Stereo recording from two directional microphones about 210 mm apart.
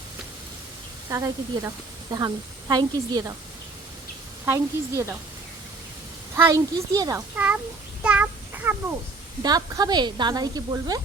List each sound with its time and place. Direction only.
1.1 s a woman's voice: 15° right (ahead or behind)
4.4 s a woman's voice: 10° right (ahead or behind)
6.3 s a woman's voice: 15° right (ahead or behind)
8.0 s a sound: 5° right (ahead or behind)
9.4 s speech: 20° right (ahead or behind)